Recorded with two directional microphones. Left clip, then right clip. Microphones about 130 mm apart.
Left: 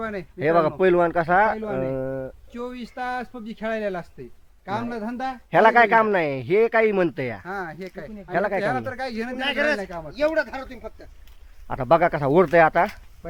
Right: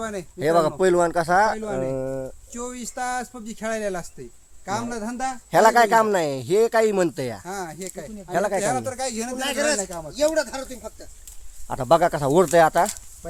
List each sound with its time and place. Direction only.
0.0 s a man's voice: 5° right (ahead or behind)
2.5 s speech: 15° left (ahead or behind)
5.5 s a man's voice: centre (ahead or behind)
7.4 s speech: 20° right (ahead or behind)
8.3 s speech: 10° right (ahead or behind)
9.4 s speech: 60° right (ahead or behind)
9.8 s speech: 5° right (ahead or behind)
10.2 s speech: 80° right
11.7 s a man's voice: centre (ahead or behind)